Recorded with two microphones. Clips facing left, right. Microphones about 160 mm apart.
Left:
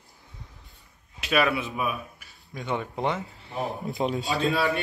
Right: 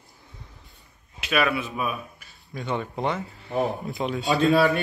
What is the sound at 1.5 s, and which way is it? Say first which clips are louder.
A man's voice: right 1 dB; 20° left (ahead or behind).